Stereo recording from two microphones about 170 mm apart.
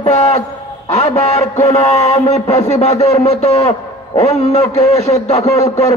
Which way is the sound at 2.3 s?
40° left (ahead or behind).